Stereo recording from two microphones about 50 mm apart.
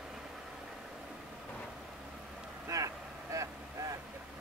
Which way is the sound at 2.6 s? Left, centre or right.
Right.